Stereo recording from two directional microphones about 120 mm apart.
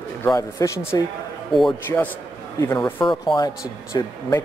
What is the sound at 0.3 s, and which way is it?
Speech, 25° left (ahead or behind).